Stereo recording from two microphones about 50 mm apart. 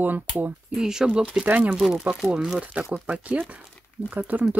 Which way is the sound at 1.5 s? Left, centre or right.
Right.